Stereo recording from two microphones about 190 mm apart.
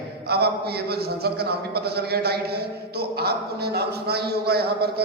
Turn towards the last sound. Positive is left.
turn(degrees=-55)  # may be behind; listen again after turning